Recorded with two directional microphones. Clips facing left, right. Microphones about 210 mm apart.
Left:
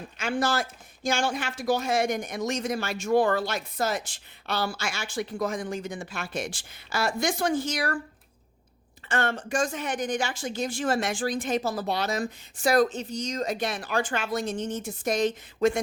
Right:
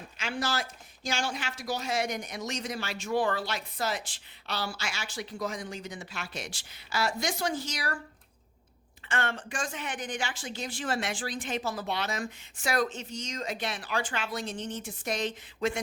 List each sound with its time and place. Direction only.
0.2 s speech: 50° left (ahead or behind)
9.0 s speech: 40° left (ahead or behind)